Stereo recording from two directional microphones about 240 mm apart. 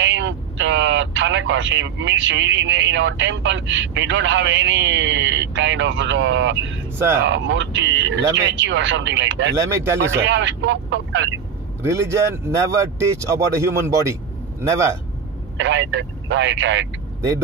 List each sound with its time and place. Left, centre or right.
0.0 s speech: right
9.6 s speech: centre
10.1 s speech: right
11.8 s speech: centre
15.5 s speech: right